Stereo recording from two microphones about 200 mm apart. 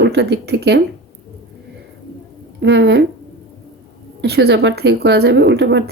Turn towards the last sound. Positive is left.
turn(degrees=-60)  # may be behind; listen again after turning